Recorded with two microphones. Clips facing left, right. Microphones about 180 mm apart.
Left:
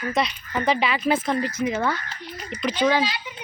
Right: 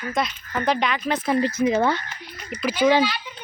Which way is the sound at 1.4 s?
25° right (ahead or behind).